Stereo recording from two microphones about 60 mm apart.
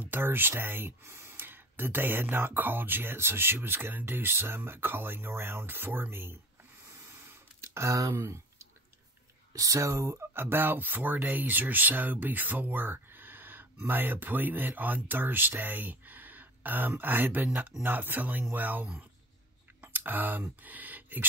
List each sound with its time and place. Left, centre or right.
0.0 s speech: right
6.9 s a sound: right
8.1 s speech: right
9.5 s speech: right
10.3 s speech: right
19.8 s a sound: right
20.6 s speech: right